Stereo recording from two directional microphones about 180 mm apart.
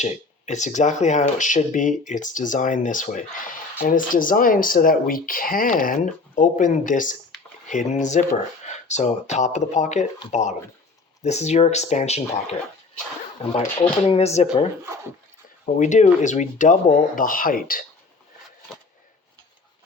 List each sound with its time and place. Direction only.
0.0 s speech: 40° left (ahead or behind)
15.6 s speech: 45° left (ahead or behind)